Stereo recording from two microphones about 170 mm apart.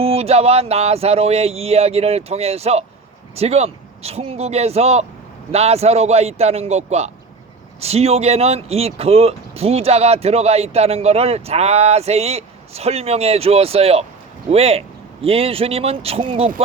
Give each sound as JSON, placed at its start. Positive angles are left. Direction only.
{"t": 0.0, "sound": "speech", "side_deg": -35}